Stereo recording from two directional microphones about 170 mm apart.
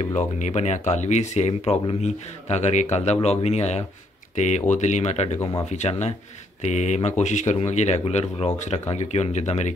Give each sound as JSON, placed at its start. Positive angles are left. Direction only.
{"t": 0.0, "sound": "speech", "side_deg": 40}
{"t": 5.4, "sound": "speech", "side_deg": 20}
{"t": 5.7, "sound": "speech", "side_deg": 40}